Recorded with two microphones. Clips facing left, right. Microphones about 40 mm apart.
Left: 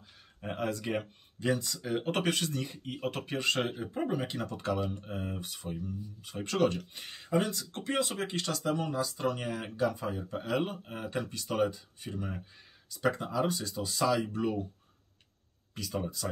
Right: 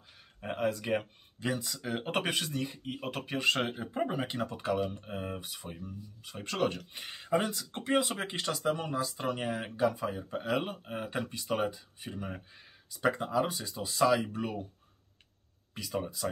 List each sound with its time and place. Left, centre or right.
0.4 s speech: centre
15.7 s speech: centre